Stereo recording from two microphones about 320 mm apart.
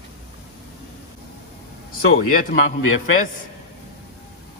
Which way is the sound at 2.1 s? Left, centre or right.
Left.